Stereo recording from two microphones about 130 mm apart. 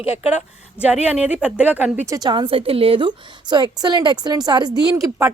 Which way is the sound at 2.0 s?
30° right (ahead or behind).